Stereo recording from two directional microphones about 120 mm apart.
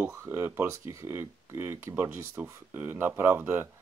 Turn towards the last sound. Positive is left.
turn(degrees=-20)  # may be behind; listen again after turning